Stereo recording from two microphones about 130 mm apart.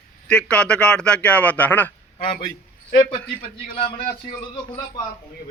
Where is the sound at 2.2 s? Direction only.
45° left (ahead or behind).